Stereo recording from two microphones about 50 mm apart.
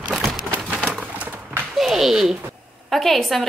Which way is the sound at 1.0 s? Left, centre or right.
Right.